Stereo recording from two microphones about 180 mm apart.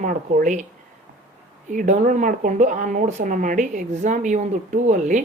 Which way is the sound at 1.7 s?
45° right (ahead or behind).